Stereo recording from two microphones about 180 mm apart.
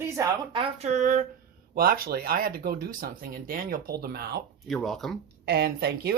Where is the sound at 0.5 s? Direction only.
40° right (ahead or behind); by 4.4 s 60° right (ahead or behind).